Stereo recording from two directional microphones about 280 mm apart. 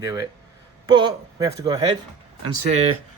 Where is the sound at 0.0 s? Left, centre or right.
Centre.